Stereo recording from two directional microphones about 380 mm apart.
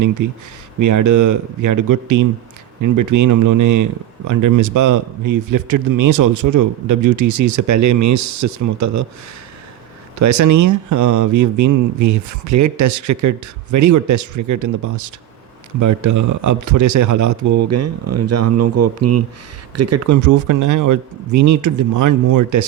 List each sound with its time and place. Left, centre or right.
0.2 s speech: right
10.2 s speech: right